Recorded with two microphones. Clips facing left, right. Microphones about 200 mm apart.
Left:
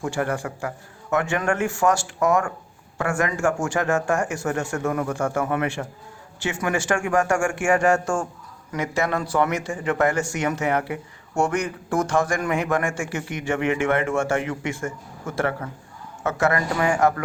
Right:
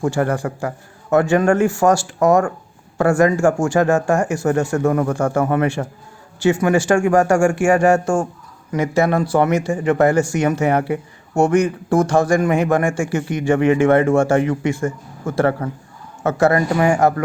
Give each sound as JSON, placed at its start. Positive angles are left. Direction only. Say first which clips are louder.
{"t": 0.0, "sound": "speech", "louder": "right 6 dB", "side_deg": -40}